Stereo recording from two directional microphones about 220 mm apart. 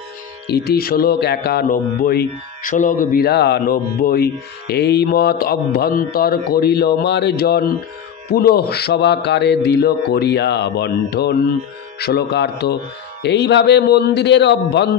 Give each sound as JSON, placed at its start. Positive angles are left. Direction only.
{"t": 0.5, "sound": "mantra", "side_deg": 45}